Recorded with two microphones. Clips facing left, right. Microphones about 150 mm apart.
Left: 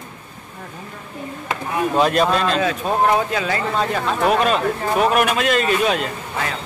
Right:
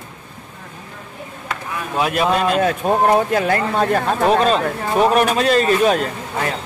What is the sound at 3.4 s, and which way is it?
Speech, 55° right (ahead or behind).